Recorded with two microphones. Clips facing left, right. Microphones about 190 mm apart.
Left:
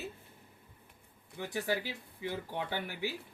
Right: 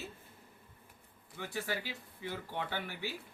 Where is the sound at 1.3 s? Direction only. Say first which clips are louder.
Left 4 dB; 15° left (ahead or behind).